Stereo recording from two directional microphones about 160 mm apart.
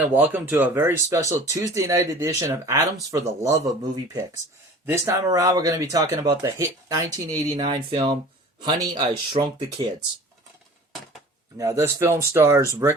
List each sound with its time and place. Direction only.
0.1 s speech: 10° right (ahead or behind)
4.9 s speech: 20° right (ahead or behind)
11.5 s speech: 20° right (ahead or behind)